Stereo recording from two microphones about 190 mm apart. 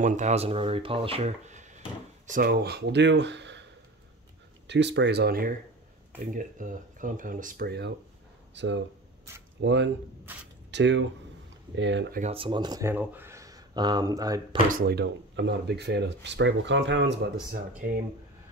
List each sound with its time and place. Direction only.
0.0 s speech: 40° right (ahead or behind); by 3.6 s 65° right (ahead or behind)
4.6 s speech: 65° right (ahead or behind)
6.3 s speech: 45° right (ahead or behind); by 7.9 s 60° right (ahead or behind)
8.5 s speech: 70° right (ahead or behind)
10.3 s speech: 10° right (ahead or behind)
10.7 s speech: 70° right (ahead or behind)
12.1 s speech: 40° right (ahead or behind)
12.4 s speech: 25° right (ahead or behind)
14.7 s speech: 55° right (ahead or behind); by 17.1 s 70° right (ahead or behind)